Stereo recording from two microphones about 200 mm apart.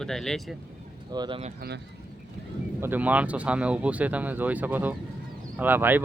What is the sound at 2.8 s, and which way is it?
Speech, 10° right (ahead or behind).